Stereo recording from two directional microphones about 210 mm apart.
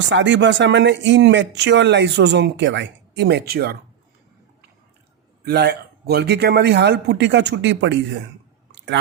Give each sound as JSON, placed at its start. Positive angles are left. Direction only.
{"t": 0.1, "sound": "speech", "side_deg": -60}
{"t": 5.5, "sound": "a man's voice", "side_deg": -50}